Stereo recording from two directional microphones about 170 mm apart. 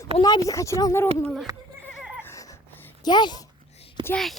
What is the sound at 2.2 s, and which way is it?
Music, 20° left (ahead or behind).